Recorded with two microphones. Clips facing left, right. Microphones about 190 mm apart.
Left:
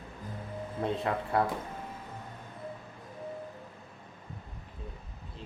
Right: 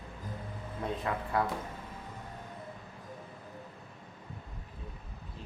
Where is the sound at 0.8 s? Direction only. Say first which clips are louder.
Left 3 dB; 25° left (ahead or behind).